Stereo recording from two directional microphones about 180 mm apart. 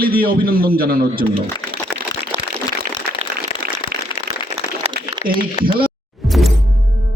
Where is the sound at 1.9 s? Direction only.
65° left (ahead or behind).